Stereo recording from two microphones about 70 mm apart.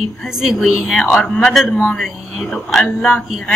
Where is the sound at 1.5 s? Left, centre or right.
Centre.